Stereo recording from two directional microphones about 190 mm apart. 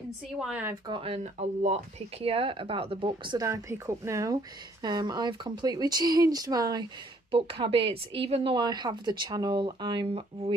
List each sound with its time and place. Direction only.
0.4 s a woman's voice: 10° right (ahead or behind)
0.8 s speech: 30° right (ahead or behind)